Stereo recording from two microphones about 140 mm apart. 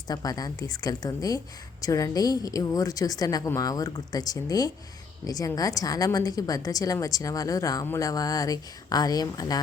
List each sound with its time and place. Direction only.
0.1 s a woman's voice: 25° left (ahead or behind)